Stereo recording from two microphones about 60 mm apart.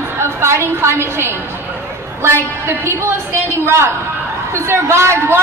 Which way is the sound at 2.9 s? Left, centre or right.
Right.